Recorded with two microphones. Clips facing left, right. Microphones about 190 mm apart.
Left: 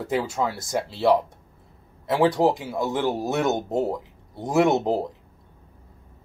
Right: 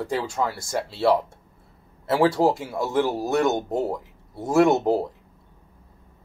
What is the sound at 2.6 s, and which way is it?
Speech, centre (ahead or behind).